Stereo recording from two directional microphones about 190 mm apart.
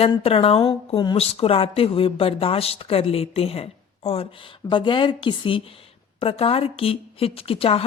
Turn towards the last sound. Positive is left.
turn(degrees=30)  # may be behind; listen again after turning